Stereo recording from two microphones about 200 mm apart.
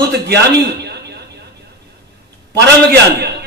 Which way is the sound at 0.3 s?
55° right (ahead or behind).